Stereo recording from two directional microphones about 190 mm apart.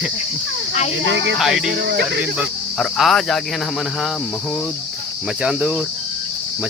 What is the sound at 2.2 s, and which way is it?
Speech, 5° right (ahead or behind).